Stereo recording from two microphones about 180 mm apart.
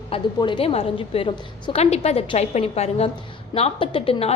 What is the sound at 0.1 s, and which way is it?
A woman's voice, 25° left (ahead or behind).